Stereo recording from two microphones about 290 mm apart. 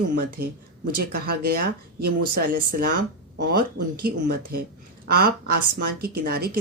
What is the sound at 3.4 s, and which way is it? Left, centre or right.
Speech, right.